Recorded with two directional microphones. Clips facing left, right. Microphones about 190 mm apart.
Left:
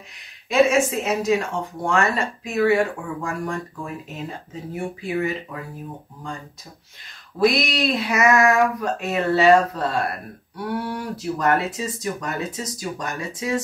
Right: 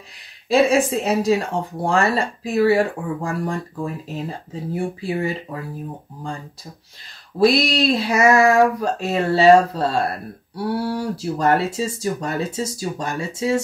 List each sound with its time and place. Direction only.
0.5 s speech: 35° right (ahead or behind)
7.3 s speech: 30° right (ahead or behind)